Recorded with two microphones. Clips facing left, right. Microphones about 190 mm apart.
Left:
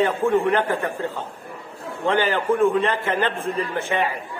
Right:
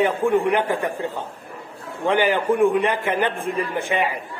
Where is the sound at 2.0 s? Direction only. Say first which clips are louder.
Right 1 dB; 15° right (ahead or behind).